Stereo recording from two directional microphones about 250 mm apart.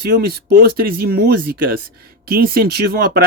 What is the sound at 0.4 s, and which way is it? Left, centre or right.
Speech, right.